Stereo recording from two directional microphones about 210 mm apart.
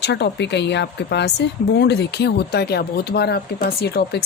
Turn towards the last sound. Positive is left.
turn(degrees=50)  # may be behind; listen again after turning